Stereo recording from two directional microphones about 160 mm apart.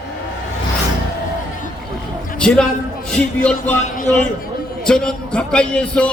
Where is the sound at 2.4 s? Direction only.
5° left (ahead or behind).